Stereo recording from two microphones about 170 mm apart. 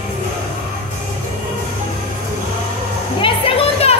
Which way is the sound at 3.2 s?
35° left (ahead or behind).